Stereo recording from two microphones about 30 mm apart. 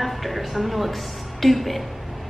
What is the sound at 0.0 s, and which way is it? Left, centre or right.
A woman's voice, centre.